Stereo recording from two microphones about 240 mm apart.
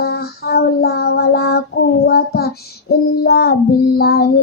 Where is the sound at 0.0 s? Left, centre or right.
Left.